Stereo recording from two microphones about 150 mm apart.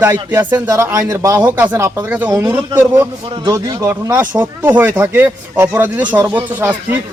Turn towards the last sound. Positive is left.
turn(degrees=-10)  # may be behind; listen again after turning